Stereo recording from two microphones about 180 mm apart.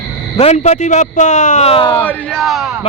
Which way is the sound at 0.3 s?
35° left (ahead or behind).